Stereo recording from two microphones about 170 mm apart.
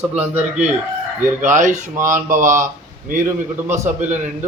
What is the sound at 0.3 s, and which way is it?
A man's voice, 40° right (ahead or behind).